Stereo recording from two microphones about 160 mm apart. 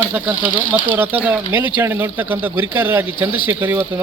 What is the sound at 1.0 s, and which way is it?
Speech, 10° right (ahead or behind).